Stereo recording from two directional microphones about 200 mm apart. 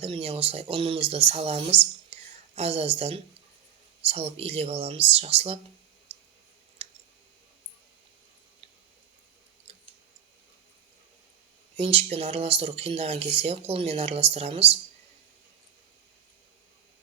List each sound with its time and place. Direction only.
0.0 s speech: 30° right (ahead or behind)
6.1 s a sound: 30° right (ahead or behind)
6.8 s clicking: 30° right (ahead or behind)
11.8 s speech: 30° right (ahead or behind)